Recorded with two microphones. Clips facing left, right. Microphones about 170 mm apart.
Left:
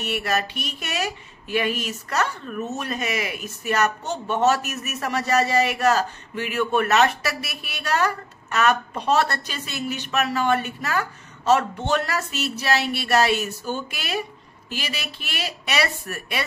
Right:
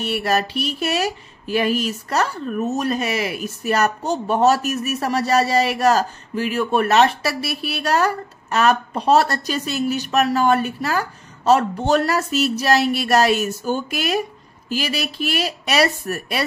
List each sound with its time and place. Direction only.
0.0 s speech: 35° right (ahead or behind)